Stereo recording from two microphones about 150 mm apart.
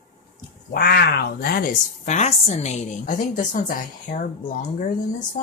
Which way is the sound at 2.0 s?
50° left (ahead or behind).